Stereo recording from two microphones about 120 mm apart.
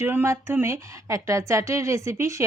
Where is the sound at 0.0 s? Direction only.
20° right (ahead or behind).